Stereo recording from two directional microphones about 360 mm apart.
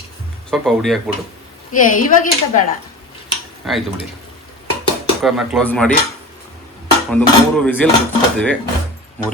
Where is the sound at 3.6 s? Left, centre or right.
Centre.